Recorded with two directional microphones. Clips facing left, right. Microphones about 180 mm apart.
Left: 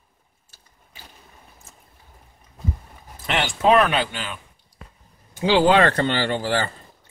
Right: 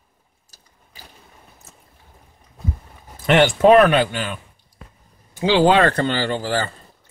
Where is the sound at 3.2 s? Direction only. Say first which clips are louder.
Right 7 dB; 50° right (ahead or behind).